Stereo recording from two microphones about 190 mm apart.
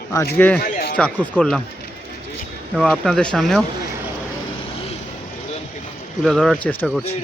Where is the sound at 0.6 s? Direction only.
50° left (ahead or behind).